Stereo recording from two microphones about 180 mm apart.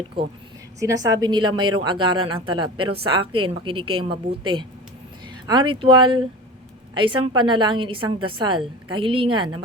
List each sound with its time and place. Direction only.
0.8 s a woman's voice: 20° right (ahead or behind)